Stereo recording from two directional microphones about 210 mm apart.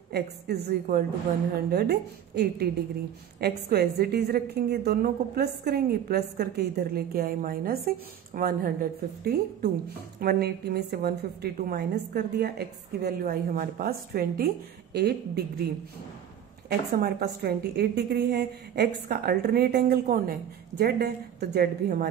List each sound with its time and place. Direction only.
0.1 s a woman's voice: 50° right (ahead or behind)
16.9 s a woman's voice: 50° right (ahead or behind)